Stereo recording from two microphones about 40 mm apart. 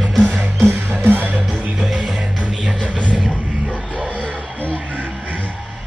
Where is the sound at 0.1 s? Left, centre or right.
Centre.